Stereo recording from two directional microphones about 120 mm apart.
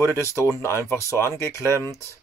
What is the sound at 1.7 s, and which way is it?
Speech, 25° right (ahead or behind).